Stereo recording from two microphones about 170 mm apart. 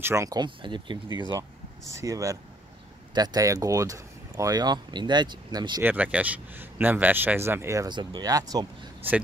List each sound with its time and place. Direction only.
0.0 s speech: 15° right (ahead or behind)
5.8 s speech: 10° right (ahead or behind)